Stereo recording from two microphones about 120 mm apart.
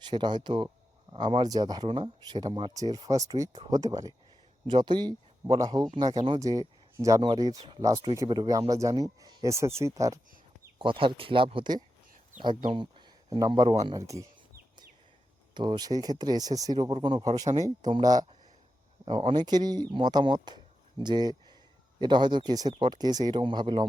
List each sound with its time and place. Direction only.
0.0 s speech: 40° right (ahead or behind)
1.9 s speech: 50° right (ahead or behind); by 4.1 s 30° right (ahead or behind)
4.6 s speech: 40° right (ahead or behind)
10.8 s speech: 45° right (ahead or behind); by 14.3 s 25° right (ahead or behind)
15.5 s speech: 40° right (ahead or behind)
19.3 s speech: 35° right (ahead or behind)